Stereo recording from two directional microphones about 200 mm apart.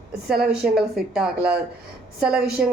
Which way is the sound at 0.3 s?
5° right (ahead or behind).